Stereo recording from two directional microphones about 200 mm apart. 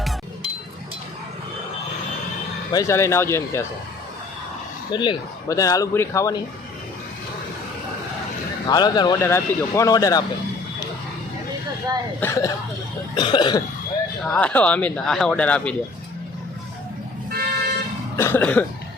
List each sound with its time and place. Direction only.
2.7 s speech: 15° left (ahead or behind)
4.9 s speech: 20° left (ahead or behind)
8.6 s speech: 20° left (ahead or behind)
12.2 s speech: 15° left (ahead or behind)
13.1 s cough: 20° left (ahead or behind)
14.3 s speech: 5° left (ahead or behind)
17.3 s toot: 50° right (ahead or behind)
18.2 s cough: 10° left (ahead or behind)